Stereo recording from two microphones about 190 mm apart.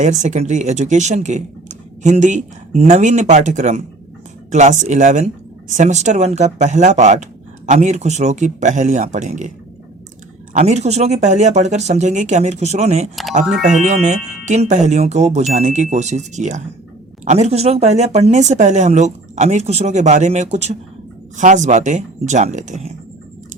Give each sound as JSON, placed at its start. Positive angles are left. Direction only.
{"t": 0.0, "sound": "speech", "side_deg": -40}
{"t": 10.5, "sound": "speech", "side_deg": -35}